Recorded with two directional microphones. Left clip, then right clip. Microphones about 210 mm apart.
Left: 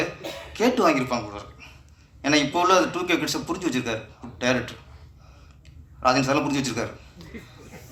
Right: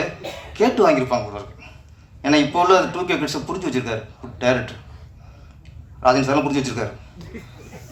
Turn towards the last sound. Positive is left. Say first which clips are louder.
# right 3 dB
turn(degrees=55)  # may be behind; listen again after turning